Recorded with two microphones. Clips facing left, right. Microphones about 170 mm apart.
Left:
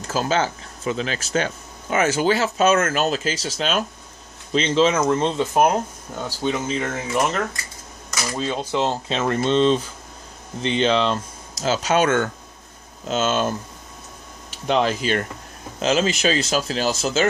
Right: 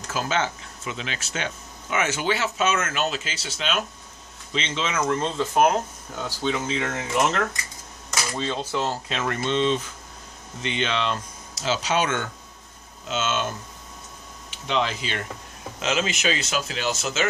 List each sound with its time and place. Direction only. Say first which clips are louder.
0.1 s speech: left 4 dB; 35° left (ahead or behind)
5.0 s speech: left 4 dB; 20° left (ahead or behind)
6.8 s speech: left 1 dB; centre (ahead or behind)
8.4 s speech: left 4 dB; 15° left (ahead or behind); by 12.3 s 50° left (ahead or behind)
13.1 s speech: left 5 dB; 40° left (ahead or behind)
14.5 s speech: left 5 dB; 45° left (ahead or behind)